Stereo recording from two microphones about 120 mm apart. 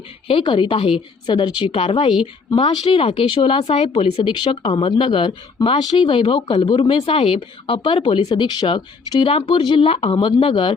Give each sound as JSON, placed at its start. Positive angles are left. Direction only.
{"t": 0.3, "sound": "speech", "side_deg": 45}